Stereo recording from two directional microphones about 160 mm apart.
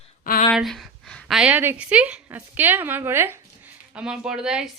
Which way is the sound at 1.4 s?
10° right (ahead or behind).